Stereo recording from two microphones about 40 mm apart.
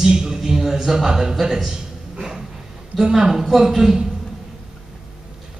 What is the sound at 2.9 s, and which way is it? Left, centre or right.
Speech, centre.